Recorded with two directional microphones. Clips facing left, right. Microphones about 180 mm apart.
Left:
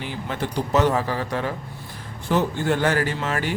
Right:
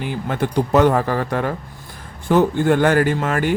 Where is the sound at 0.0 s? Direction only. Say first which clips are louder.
Right 6 dB; 50° right (ahead or behind).